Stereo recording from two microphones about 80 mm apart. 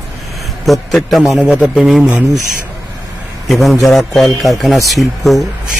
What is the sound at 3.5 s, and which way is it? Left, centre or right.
A man's voice, centre.